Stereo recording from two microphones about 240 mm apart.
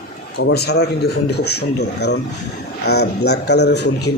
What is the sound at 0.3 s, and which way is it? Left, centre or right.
A man's voice, left.